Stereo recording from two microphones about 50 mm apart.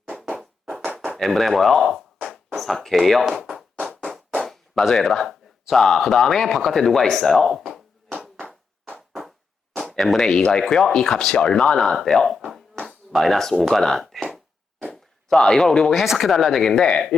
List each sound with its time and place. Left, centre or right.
1.2 s speech: centre
4.4 s speech: centre
9.9 s speech: centre
16.6 s speech: centre